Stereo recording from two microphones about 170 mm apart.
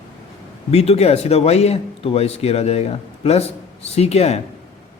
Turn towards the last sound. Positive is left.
turn(degrees=40)  # may be behind; listen again after turning